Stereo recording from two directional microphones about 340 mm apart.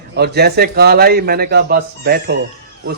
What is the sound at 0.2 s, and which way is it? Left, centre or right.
Speech, right.